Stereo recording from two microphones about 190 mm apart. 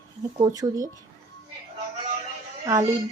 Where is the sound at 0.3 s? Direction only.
20° right (ahead or behind).